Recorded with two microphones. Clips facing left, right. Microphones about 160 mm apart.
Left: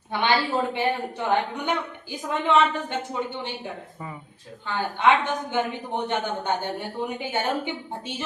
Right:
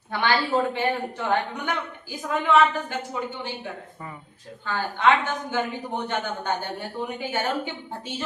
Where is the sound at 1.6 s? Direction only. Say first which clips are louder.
Left 2 dB; 20° left (ahead or behind).